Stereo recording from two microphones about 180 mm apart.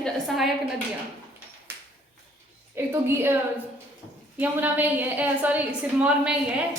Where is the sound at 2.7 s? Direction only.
10° right (ahead or behind).